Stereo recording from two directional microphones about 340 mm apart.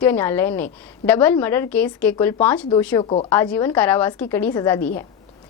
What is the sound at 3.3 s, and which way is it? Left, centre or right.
A woman's voice, centre.